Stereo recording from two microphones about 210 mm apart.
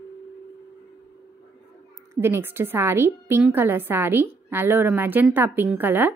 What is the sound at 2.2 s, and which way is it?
Speech, 10° right (ahead or behind).